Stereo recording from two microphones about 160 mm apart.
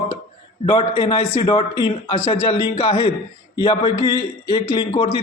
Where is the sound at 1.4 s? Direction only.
35° left (ahead or behind).